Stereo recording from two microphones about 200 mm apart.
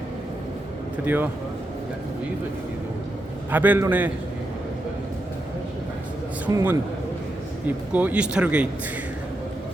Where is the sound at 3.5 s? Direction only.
10° right (ahead or behind).